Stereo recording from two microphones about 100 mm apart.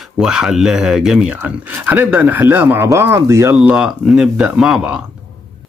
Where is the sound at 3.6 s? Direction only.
10° right (ahead or behind).